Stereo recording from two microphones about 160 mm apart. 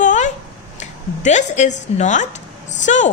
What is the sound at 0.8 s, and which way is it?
A woman's voice, 45° left (ahead or behind).